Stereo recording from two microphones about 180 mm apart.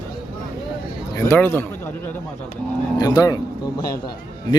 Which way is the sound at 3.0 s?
20° left (ahead or behind).